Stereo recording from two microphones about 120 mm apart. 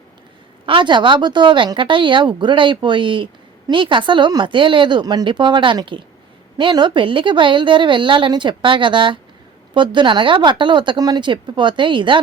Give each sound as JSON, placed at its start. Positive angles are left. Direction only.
{"t": 0.6, "sound": "speech", "side_deg": -45}